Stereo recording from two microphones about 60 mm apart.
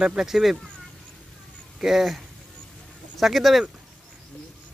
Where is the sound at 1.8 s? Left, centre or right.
Centre.